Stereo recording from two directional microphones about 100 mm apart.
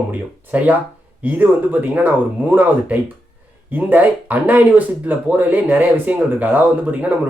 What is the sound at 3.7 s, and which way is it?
Speech, 15° right (ahead or behind).